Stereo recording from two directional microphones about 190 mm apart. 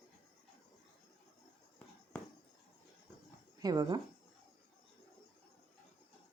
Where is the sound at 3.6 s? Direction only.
20° right (ahead or behind).